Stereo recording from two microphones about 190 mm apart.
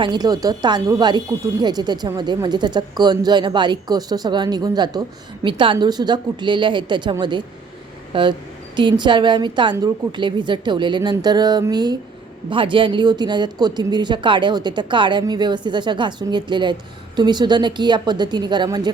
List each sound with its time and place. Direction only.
0.0 s speech: 20° right (ahead or behind)